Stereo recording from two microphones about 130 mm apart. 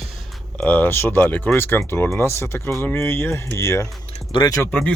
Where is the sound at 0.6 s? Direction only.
10° left (ahead or behind); by 4.6 s 30° left (ahead or behind).